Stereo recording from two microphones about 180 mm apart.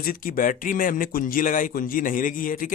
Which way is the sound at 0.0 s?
50° left (ahead or behind).